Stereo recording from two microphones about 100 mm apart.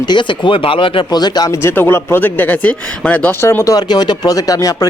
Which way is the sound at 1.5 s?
25° left (ahead or behind).